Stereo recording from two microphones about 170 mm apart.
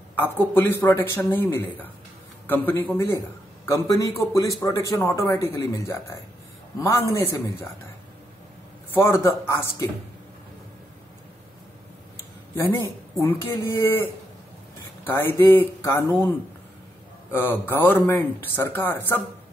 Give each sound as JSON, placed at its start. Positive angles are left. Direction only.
{"t": 0.1, "sound": "speech", "side_deg": 10}
{"t": 8.9, "sound": "speech", "side_deg": 15}
{"t": 13.2, "sound": "speech", "side_deg": 15}